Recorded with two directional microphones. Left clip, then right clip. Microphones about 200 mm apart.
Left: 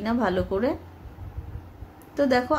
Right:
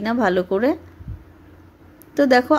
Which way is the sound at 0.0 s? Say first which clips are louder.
Right 6 dB; 35° right (ahead or behind).